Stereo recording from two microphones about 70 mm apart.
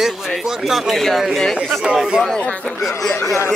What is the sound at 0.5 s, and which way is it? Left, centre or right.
Speech, centre.